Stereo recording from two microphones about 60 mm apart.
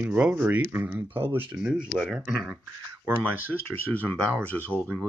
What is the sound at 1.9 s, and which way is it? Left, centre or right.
Speech, centre.